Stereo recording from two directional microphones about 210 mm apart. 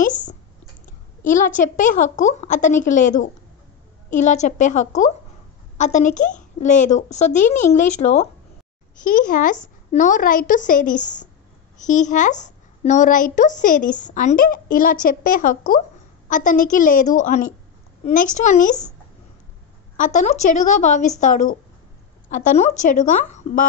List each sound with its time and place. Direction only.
0.0 s a sound: 40° left (ahead or behind)
1.3 s a child's voice: 40° left (ahead or behind)
20.0 s a child's voice: 35° left (ahead or behind)